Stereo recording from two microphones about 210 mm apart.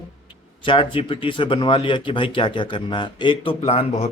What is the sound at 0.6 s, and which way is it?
A man's voice, 25° left (ahead or behind).